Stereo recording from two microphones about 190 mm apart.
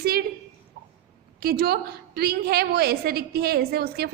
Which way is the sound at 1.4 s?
50° right (ahead or behind).